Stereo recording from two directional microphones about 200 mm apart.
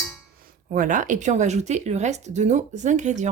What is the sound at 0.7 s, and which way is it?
Speech, 40° right (ahead or behind).